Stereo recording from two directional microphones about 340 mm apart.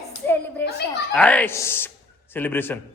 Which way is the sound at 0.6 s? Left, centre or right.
Left.